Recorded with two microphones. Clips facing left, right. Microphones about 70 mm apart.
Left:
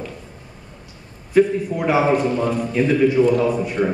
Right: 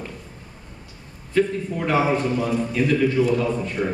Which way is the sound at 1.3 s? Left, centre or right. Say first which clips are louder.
Left 5 dB; centre.